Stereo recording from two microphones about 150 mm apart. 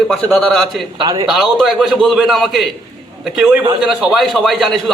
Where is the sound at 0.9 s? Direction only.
35° right (ahead or behind).